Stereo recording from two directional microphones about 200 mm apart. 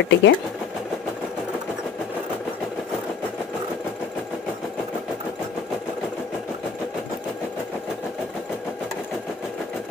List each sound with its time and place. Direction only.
0.0 s speech: 60° left (ahead or behind)